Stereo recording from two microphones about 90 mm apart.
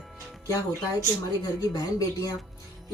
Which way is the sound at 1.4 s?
45° left (ahead or behind).